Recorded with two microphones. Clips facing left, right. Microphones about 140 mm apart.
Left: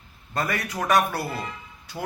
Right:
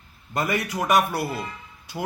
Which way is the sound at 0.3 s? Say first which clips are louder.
Right 2 dB; 20° right (ahead or behind).